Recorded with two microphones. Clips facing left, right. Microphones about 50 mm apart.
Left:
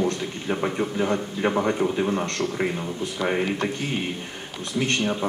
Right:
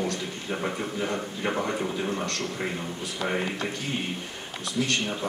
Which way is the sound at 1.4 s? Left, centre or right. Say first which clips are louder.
Left 6 dB; left.